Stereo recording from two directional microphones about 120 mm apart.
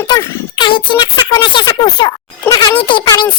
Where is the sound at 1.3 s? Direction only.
35° left (ahead or behind).